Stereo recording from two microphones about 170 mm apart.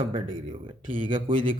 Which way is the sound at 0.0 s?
30° right (ahead or behind).